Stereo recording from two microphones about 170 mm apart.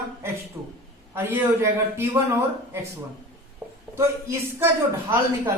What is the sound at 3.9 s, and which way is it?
Speech, 15° right (ahead or behind).